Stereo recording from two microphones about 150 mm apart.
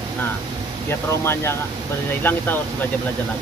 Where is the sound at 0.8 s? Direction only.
15° left (ahead or behind).